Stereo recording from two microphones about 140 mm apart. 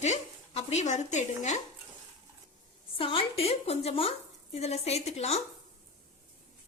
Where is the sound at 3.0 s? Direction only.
40° left (ahead or behind).